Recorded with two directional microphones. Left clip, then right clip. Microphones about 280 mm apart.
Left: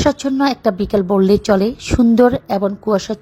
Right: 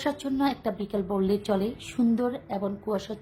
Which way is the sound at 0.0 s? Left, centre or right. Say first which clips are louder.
Left 12 dB; left.